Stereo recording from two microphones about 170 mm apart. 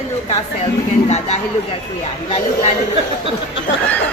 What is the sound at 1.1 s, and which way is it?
Speech, 40° left (ahead or behind).